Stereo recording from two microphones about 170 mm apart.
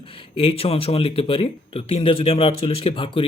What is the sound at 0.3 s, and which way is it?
Speech, 35° left (ahead or behind).